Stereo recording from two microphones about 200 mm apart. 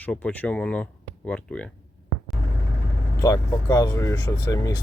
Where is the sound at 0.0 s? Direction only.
5° left (ahead or behind).